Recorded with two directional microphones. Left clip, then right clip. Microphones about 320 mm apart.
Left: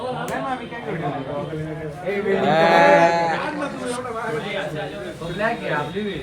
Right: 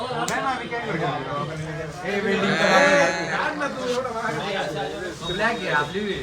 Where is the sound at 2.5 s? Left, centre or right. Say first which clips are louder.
Left 4 dB; centre.